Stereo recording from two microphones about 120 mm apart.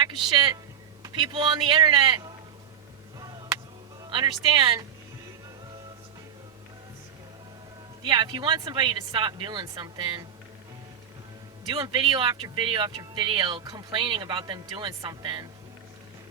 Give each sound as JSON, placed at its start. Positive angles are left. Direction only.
{"t": 0.0, "sound": "a man's voice", "side_deg": -40}
{"t": 3.2, "sound": "a sound", "side_deg": -30}
{"t": 4.0, "sound": "speech", "side_deg": -35}
{"t": 8.0, "sound": "speech", "side_deg": -40}
{"t": 11.8, "sound": "speech", "side_deg": -40}